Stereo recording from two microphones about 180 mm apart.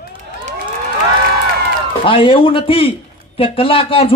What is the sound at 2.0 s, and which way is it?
A man's voice, 30° left (ahead or behind).